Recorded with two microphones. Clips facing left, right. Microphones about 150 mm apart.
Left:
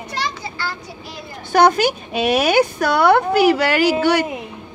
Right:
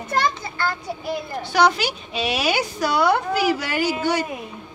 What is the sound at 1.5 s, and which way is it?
Speech, 50° left (ahead or behind).